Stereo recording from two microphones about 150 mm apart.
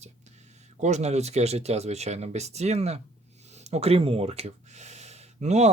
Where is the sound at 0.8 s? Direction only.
50° right (ahead or behind).